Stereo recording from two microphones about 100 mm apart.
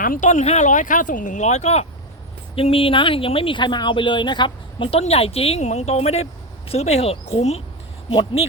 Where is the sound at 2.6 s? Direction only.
70° left (ahead or behind).